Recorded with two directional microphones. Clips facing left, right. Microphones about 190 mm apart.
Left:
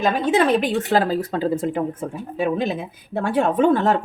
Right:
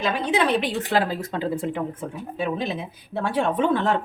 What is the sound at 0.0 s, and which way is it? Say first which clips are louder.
A woman's voice: left 4 dB; 45° left (ahead or behind).